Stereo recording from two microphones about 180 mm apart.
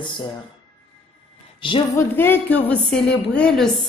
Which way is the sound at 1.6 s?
30° left (ahead or behind).